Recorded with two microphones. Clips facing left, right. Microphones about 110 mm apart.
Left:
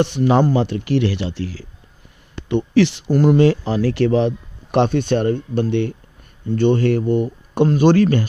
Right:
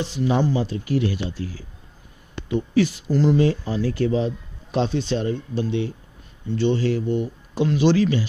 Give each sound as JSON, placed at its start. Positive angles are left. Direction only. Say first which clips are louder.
{"t": 0.0, "sound": "speech", "louder": "left 6 dB", "side_deg": 65}
{"t": 3.4, "sound": "a man's voice", "louder": "left 6 dB", "side_deg": 80}